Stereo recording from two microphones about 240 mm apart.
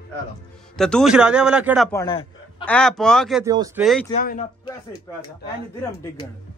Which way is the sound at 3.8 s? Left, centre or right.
Centre.